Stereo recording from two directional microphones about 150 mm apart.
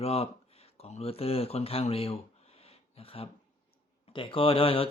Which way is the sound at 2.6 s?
40° left (ahead or behind).